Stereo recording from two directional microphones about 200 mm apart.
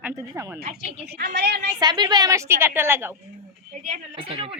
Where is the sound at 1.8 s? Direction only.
20° right (ahead or behind).